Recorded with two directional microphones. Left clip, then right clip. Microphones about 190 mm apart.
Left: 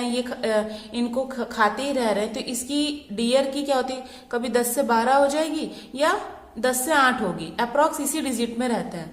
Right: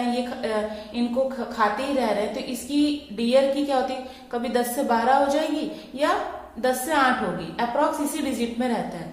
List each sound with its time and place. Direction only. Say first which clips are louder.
0.1 s a woman's voice: left 2 dB; 40° left (ahead or behind)